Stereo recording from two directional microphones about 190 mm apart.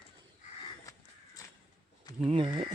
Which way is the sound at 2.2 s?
25° right (ahead or behind).